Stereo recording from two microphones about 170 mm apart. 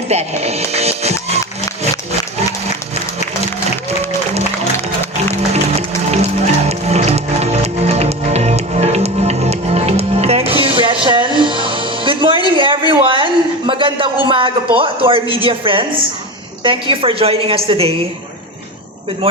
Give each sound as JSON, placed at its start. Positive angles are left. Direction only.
{"t": 0.1, "sound": "a woman's voice", "side_deg": -40}
{"t": 6.1, "sound": "music", "side_deg": -40}
{"t": 16.6, "sound": "a woman's voice", "side_deg": -30}